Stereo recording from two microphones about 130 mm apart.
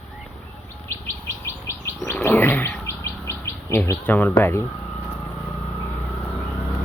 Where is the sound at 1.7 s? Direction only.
20° left (ahead or behind).